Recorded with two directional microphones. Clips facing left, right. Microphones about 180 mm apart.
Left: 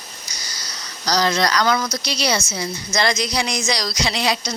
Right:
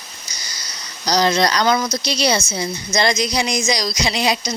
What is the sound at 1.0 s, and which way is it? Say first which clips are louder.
A woman's voice: right 3 dB; 20° right (ahead or behind).